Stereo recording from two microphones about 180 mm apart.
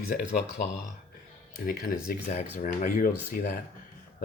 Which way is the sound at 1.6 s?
55° left (ahead or behind).